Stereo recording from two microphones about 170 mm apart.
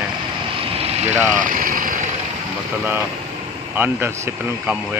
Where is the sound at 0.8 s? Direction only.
40° right (ahead or behind).